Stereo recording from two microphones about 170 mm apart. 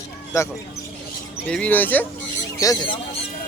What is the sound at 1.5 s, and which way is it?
Speech, 10° left (ahead or behind).